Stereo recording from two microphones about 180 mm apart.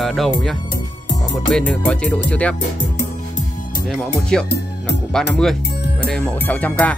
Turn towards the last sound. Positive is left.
turn(degrees=10)  # may be behind; listen again after turning